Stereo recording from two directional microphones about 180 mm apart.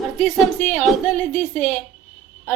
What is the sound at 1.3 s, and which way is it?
Speech, 40° left (ahead or behind).